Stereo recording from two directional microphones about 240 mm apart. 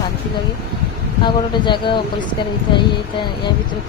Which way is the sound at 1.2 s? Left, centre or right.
Centre.